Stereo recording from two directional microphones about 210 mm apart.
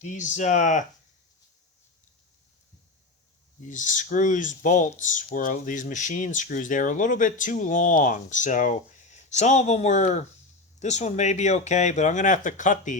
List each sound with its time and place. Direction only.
0.0 s speech: 35° left (ahead or behind)
3.7 s speech: 35° left (ahead or behind)